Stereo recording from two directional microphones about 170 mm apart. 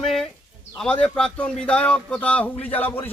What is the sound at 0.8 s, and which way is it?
A man's voice, 5° left (ahead or behind).